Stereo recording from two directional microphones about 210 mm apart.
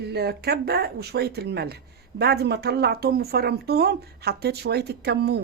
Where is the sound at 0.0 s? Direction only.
50° right (ahead or behind).